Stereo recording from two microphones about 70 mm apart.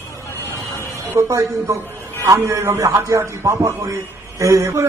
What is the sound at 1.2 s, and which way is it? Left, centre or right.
A man's voice, right.